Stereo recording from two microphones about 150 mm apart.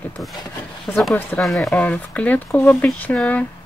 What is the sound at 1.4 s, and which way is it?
Speech, centre (ahead or behind).